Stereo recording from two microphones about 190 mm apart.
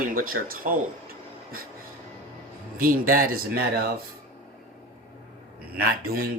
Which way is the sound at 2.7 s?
50° right (ahead or behind).